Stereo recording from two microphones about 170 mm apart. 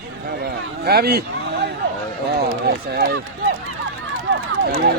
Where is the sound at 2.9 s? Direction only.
90° right.